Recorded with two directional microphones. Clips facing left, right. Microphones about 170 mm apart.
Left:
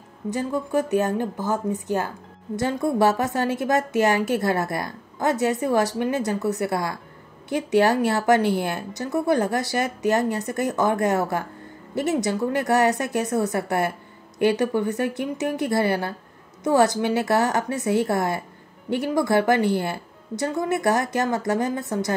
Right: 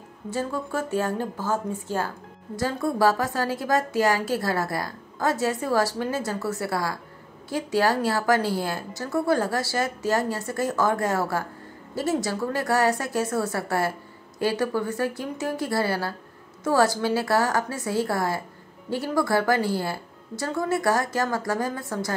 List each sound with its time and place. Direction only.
0.3 s a woman's voice: 15° left (ahead or behind)